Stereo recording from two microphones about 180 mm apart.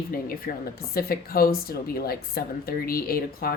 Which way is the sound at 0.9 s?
55° left (ahead or behind).